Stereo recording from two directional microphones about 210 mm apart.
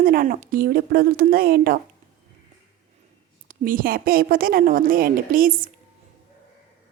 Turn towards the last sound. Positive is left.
turn(degrees=-40)  # may be behind; listen again after turning